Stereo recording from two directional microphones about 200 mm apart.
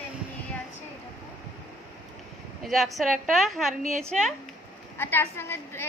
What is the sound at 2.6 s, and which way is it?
A woman's voice, centre (ahead or behind).